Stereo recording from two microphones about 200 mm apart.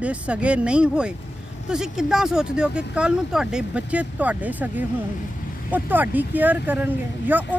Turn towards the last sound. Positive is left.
turn(degrees=-10)  # may be behind; listen again after turning